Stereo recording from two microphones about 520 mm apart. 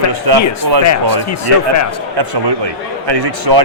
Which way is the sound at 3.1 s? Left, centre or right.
Right.